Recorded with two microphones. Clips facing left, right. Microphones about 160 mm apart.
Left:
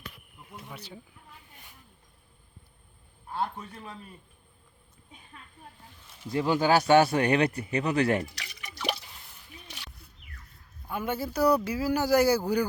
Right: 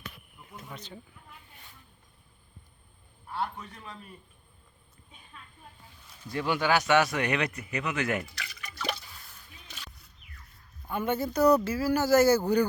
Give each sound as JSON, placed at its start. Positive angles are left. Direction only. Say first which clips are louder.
{"t": 0.6, "sound": "speech", "louder": "right 1 dB", "side_deg": 10}
{"t": 6.2, "sound": "speech", "louder": "left 3 dB", "side_deg": 30}
{"t": 8.4, "sound": "drip", "louder": "even", "side_deg": 15}
{"t": 10.8, "sound": "speech", "louder": "right 2 dB", "side_deg": 5}